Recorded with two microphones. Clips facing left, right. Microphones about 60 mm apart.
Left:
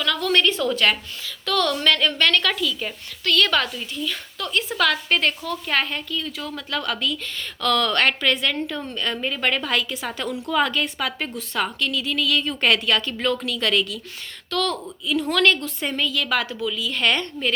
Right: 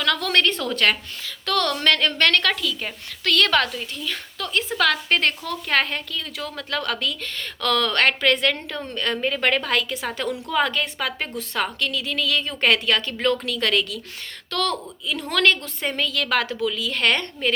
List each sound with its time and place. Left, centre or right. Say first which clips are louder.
0.0 s a sound: even; right
0.7 s a woman's voice: even; right
3.2 s a woman's voice: right 1 dB; right
4.0 s a woman's voice: left 1 dB; right
5.5 s a woman's voice: right 1 dB; right
6.6 s a woman's voice: even; right
10.0 s a woman's voice: right 1 dB; right
11.3 s a woman's voice: even; right